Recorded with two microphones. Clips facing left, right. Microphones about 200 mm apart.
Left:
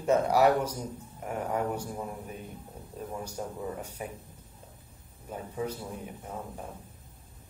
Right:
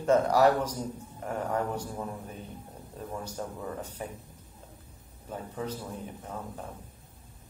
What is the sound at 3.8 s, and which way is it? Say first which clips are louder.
Speech: even; 10° left (ahead or behind).